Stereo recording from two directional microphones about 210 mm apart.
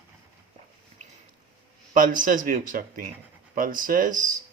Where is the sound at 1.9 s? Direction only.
40° right (ahead or behind).